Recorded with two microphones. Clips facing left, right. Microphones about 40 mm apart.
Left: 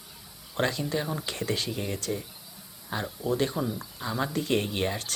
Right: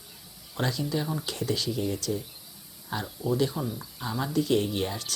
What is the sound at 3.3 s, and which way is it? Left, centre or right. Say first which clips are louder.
Speech: right 1 dB; left.